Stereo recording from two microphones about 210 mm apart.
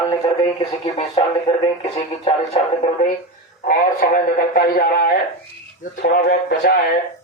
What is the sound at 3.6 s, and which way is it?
A man's voice, 40° left (ahead or behind).